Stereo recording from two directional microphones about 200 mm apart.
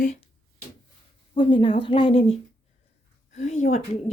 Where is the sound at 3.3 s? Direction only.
35° left (ahead or behind).